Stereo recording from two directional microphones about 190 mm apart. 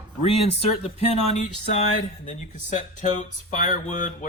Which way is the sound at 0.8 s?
35° left (ahead or behind).